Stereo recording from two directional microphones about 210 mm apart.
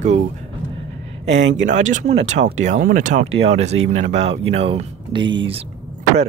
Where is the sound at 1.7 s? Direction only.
35° right (ahead or behind).